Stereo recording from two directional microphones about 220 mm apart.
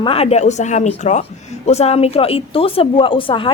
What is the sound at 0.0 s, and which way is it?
Speech, 25° left (ahead or behind).